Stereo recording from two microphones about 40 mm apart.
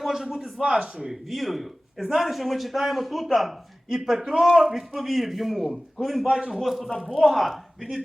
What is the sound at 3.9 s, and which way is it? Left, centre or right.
Speech, centre.